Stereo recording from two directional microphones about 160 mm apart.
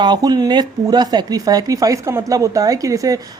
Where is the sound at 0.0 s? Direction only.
25° right (ahead or behind).